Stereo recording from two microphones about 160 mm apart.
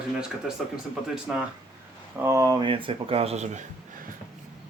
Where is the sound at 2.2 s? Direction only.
20° right (ahead or behind); by 4.1 s 50° right (ahead or behind).